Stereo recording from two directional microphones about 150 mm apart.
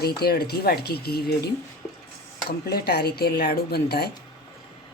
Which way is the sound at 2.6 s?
90° left.